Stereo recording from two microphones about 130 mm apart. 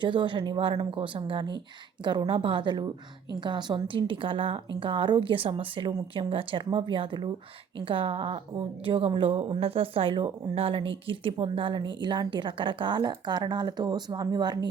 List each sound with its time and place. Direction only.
0.0 s a woman's voice: 40° right (ahead or behind)